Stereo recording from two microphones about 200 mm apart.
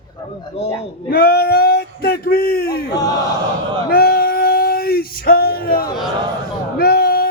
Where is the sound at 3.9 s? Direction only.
50° left (ahead or behind).